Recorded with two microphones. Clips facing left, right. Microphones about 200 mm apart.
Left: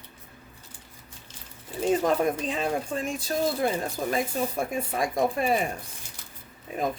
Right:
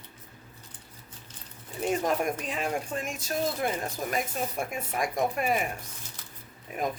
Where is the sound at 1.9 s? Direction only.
35° left (ahead or behind).